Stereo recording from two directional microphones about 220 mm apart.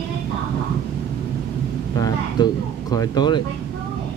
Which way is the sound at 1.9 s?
20° left (ahead or behind).